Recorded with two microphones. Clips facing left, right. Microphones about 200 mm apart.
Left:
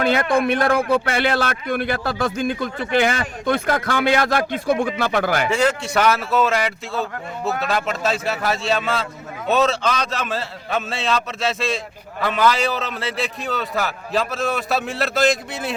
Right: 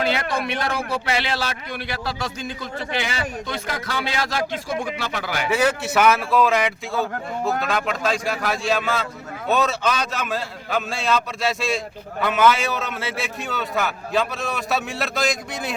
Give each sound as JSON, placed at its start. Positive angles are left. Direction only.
{"t": 0.0, "sound": "speech", "side_deg": 55}
{"t": 5.5, "sound": "a man's voice", "side_deg": -5}